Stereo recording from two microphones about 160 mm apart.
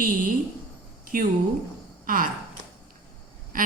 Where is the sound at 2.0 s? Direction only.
60° right (ahead or behind).